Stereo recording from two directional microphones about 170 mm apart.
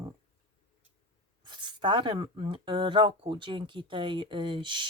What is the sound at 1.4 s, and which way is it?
Speech, 25° right (ahead or behind).